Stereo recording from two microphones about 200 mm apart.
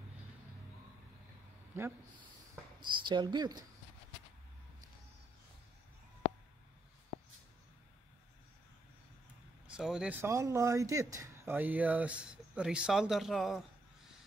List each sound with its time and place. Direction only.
1.7 s speech: 10° right (ahead or behind)
2.8 s speech: 25° right (ahead or behind)
9.8 s speech: 5° right (ahead or behind)
10.2 s speech: 15° right (ahead or behind)